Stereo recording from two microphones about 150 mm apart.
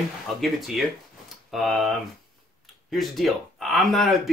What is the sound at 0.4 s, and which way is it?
Speech, centre (ahead or behind).